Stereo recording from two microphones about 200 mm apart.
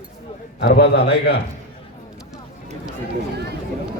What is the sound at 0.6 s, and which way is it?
Speech, 55° left (ahead or behind).